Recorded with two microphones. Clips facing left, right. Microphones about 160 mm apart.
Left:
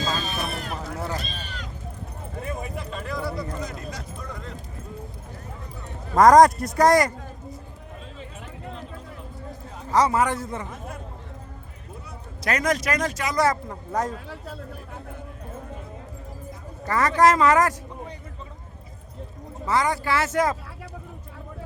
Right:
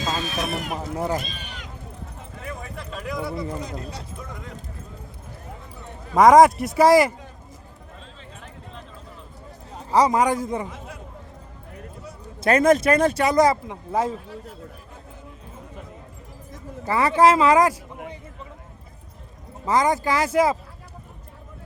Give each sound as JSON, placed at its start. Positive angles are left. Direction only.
{"t": 0.2, "sound": "a sound", "side_deg": -85}
{"t": 0.5, "sound": "speech", "side_deg": -15}
{"t": 2.4, "sound": "speech", "side_deg": 25}
{"t": 3.0, "sound": "speech", "side_deg": -15}
{"t": 6.1, "sound": "speech", "side_deg": 0}
{"t": 9.9, "sound": "speech", "side_deg": -15}
{"t": 10.7, "sound": "chatter", "side_deg": 50}
{"t": 12.5, "sound": "speech", "side_deg": -30}
{"t": 13.4, "sound": "speech", "side_deg": -10}
{"t": 14.3, "sound": "speech", "side_deg": 85}
{"t": 16.8, "sound": "speech", "side_deg": -10}
{"t": 19.6, "sound": "speech", "side_deg": -20}